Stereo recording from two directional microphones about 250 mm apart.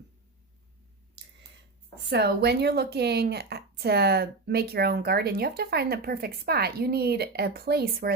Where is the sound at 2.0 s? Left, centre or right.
Right.